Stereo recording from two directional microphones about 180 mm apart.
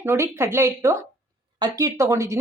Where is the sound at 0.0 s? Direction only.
15° right (ahead or behind).